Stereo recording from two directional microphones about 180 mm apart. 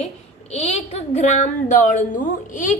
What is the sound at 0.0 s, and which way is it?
A woman's voice, 35° left (ahead or behind).